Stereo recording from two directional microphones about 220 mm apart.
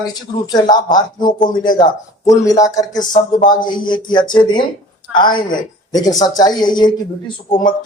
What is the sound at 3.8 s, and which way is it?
Speech, 20° left (ahead or behind).